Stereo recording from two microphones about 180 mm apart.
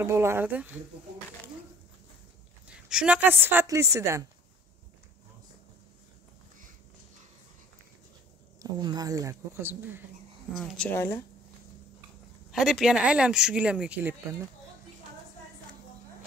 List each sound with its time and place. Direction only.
0.0 s speech: 15° right (ahead or behind)
2.9 s speech: 5° right (ahead or behind)
8.5 s speech: 25° right (ahead or behind)
10.5 s speech: centre (ahead or behind)
10.9 s speech: 15° left (ahead or behind)
12.4 s speech: centre (ahead or behind)